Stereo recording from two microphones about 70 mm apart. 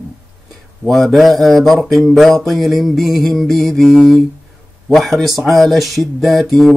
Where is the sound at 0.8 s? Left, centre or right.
Centre.